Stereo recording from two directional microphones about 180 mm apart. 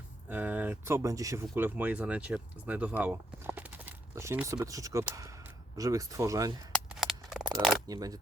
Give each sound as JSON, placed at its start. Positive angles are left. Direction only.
{"t": 0.3, "sound": "speech", "side_deg": -10}
{"t": 6.7, "sound": "a sound", "side_deg": 0}
{"t": 7.9, "sound": "speech", "side_deg": -20}